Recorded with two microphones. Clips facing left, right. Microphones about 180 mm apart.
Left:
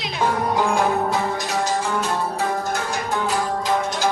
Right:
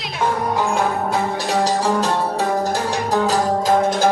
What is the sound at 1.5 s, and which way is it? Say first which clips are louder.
Music: right 6 dB; 35° right (ahead or behind).